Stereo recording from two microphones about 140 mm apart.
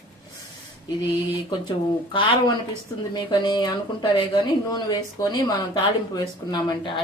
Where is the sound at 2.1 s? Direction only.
35° left (ahead or behind).